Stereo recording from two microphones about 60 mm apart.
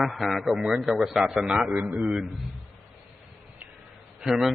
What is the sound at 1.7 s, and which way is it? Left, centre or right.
Speech, right.